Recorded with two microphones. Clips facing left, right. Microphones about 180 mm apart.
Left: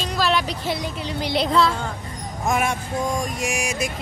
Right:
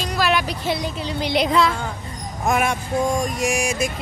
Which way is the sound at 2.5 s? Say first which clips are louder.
Right 2 dB; 65° right (ahead or behind).